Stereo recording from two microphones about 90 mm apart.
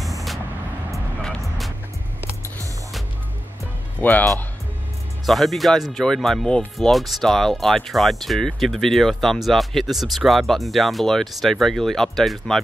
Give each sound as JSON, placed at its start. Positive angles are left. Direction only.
{"t": 0.9, "sound": "music", "side_deg": 0}
{"t": 4.0, "sound": "speech", "side_deg": 20}
{"t": 5.2, "sound": "speech", "side_deg": 0}